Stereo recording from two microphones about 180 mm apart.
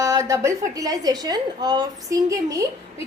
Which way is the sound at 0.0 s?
20° right (ahead or behind).